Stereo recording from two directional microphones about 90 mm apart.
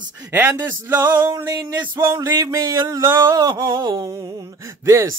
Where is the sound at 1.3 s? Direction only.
45° right (ahead or behind).